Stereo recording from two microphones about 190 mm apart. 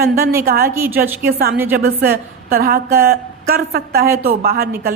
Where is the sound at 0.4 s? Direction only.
55° right (ahead or behind).